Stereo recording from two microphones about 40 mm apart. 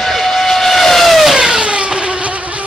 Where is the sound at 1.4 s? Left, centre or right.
Right.